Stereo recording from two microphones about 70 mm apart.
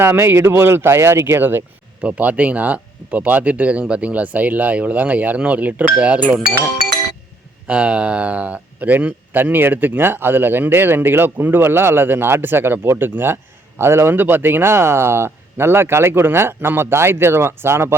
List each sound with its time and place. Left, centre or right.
0.0 s speech: right
2.0 s speech: right
7.7 s speech: centre; by 17.9 s right